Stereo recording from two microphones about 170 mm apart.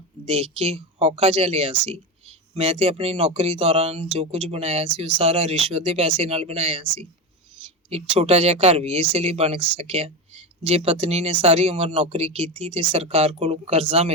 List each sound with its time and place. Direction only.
0.3 s speech: 35° right (ahead or behind)